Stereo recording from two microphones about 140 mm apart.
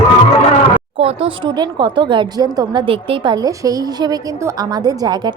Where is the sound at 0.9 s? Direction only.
40° right (ahead or behind).